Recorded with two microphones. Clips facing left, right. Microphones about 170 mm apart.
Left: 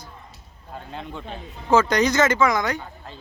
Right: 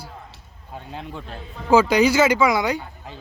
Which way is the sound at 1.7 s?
10° right (ahead or behind).